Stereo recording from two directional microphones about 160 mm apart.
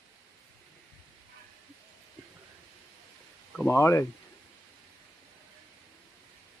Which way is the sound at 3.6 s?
15° left (ahead or behind).